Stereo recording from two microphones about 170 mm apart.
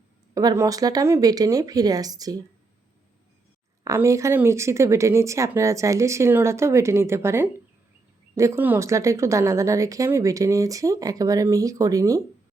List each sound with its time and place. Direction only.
0.3 s speech: 20° right (ahead or behind)
3.8 s speech: 15° right (ahead or behind)